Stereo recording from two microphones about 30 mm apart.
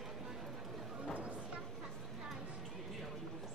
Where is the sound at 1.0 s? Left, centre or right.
Right.